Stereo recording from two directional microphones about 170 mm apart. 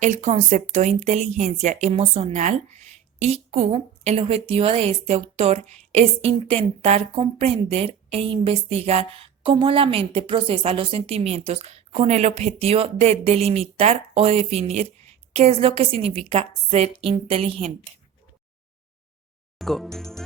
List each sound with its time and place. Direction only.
0.0 s a woman's voice: 45° right (ahead or behind)
19.5 s speech: centre (ahead or behind)